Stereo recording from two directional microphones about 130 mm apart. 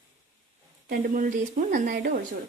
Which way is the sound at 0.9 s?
90° right.